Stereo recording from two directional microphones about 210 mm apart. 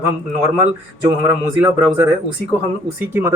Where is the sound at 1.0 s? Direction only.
15° right (ahead or behind).